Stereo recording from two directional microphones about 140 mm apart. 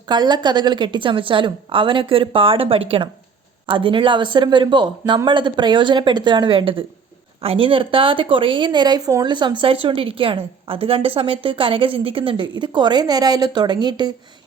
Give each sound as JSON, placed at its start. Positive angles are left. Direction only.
{"t": 0.1, "sound": "a woman's voice", "side_deg": -30}